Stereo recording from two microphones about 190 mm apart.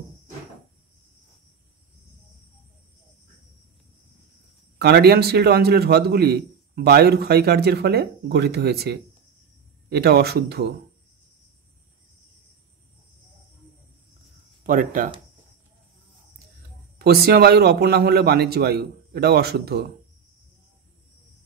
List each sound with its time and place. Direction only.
4.7 s a man's voice: 60° right (ahead or behind)
14.6 s speech: 45° right (ahead or behind)
17.0 s a man's voice: 55° right (ahead or behind)